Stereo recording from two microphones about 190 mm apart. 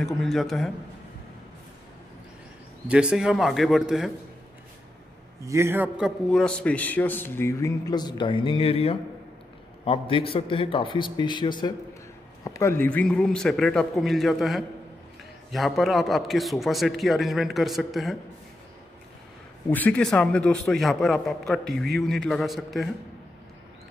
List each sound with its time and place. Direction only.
0.0 s a man's voice: centre (ahead or behind)
2.9 s a man's voice: 5° right (ahead or behind)
5.4 s a man's voice: 15° right (ahead or behind)
19.7 s a man's voice: 5° left (ahead or behind)